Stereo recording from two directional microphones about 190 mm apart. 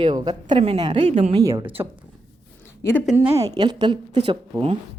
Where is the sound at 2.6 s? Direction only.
10° left (ahead or behind).